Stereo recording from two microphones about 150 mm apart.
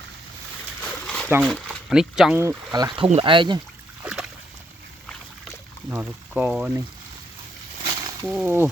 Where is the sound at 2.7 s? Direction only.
30° right (ahead or behind).